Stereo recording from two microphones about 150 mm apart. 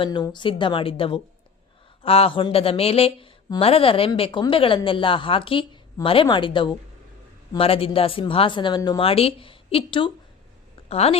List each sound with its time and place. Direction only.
0.0 s speech: 30° left (ahead or behind)
9.0 s a woman's voice: 40° left (ahead or behind)